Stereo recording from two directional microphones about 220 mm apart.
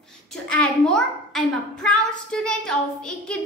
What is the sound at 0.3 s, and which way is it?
A child's voice, 5° left (ahead or behind).